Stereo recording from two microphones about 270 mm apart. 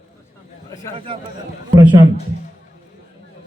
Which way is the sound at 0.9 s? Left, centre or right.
Centre.